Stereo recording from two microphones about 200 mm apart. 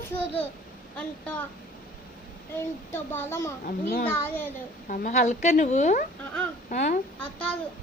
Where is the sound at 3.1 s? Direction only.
10° left (ahead or behind).